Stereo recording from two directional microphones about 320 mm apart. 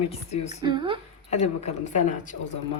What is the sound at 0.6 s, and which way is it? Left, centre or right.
Speech, centre.